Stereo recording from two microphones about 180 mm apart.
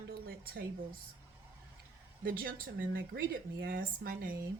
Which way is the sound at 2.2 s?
55° right (ahead or behind).